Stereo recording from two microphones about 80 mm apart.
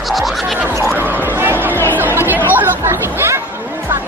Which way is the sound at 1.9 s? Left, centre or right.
Right.